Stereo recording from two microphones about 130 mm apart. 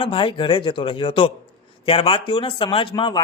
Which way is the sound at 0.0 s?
40° left (ahead or behind).